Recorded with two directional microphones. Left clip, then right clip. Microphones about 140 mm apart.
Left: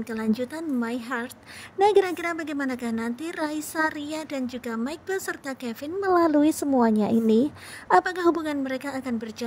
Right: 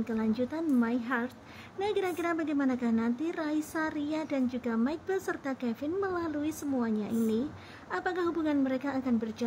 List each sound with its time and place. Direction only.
0.0 s a woman's voice: 55° left (ahead or behind)